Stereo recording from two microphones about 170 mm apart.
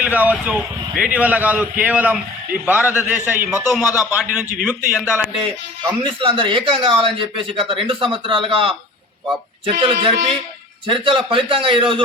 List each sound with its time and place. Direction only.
0.0 s a man's voice: 10° right (ahead or behind)
6.0 s speech: 30° right (ahead or behind)
9.8 s speech: 30° right (ahead or behind)